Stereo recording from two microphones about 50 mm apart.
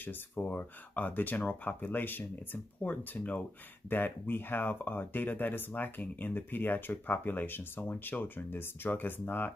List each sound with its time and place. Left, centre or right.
0.4 s speech: left
3.9 s speech: left